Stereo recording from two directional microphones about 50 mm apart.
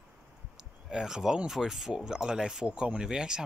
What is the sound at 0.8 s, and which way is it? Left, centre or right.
Speech, centre.